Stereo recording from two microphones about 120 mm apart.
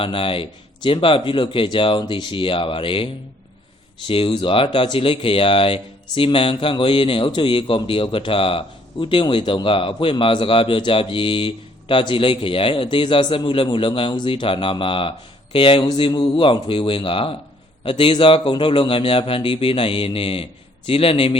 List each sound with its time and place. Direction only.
0.0 s speech: 50° left (ahead or behind)